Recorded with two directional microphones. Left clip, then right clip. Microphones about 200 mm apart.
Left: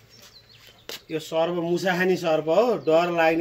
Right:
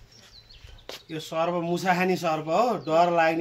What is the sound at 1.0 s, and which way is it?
Speech, 25° right (ahead or behind).